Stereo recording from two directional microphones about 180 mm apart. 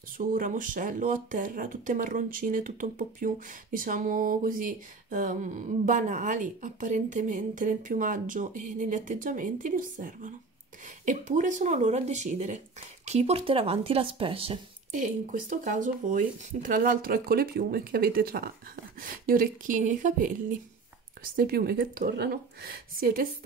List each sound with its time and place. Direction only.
0.2 s speech: 50° right (ahead or behind); by 14.6 s 30° right (ahead or behind)
15.5 s speech: 45° right (ahead or behind)